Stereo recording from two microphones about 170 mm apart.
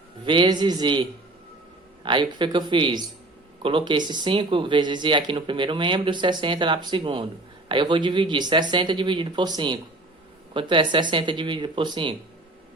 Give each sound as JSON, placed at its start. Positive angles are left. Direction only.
{"t": 0.3, "sound": "speech", "side_deg": -25}
{"t": 2.0, "sound": "speech", "side_deg": -25}